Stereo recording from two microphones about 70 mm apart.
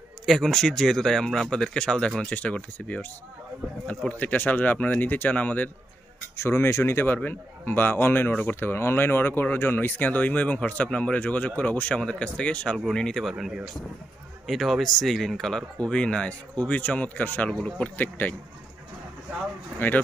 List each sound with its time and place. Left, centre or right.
0.3 s a man's voice: centre; by 5.7 s left
6.3 s a man's voice: left; by 13.2 s centre
13.2 s speech: centre; by 17.5 s left
17.5 s speech: centre
17.8 s a man's voice: left